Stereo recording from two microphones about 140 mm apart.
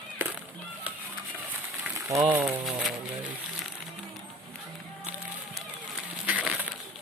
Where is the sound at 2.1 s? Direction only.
20° right (ahead or behind).